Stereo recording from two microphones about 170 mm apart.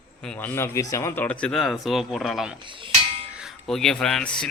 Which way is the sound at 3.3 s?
Centre (ahead or behind).